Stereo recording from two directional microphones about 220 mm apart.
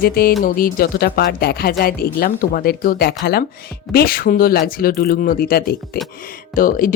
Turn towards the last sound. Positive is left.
turn(degrees=40)  # may be behind; listen again after turning